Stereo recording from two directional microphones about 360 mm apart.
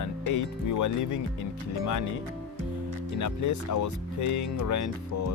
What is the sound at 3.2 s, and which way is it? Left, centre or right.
Speech, left.